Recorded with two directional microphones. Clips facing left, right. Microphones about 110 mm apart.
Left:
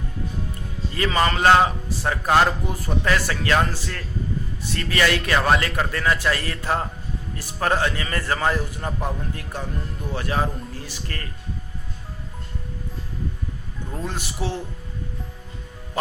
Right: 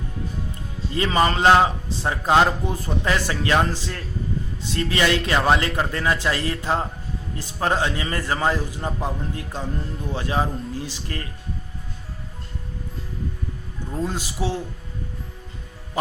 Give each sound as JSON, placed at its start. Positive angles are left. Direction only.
{"t": 0.9, "sound": "a man's voice", "side_deg": -20}
{"t": 13.9, "sound": "speech", "side_deg": -15}